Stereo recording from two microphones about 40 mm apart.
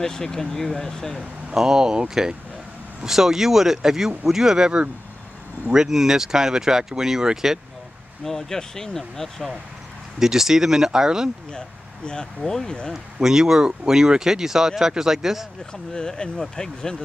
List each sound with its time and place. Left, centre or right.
0.0 s speech: centre
1.5 s speech: centre
8.2 s speech: centre
10.1 s speech: centre
12.4 s speech: centre
12.9 s speech: centre
15.9 s speech: centre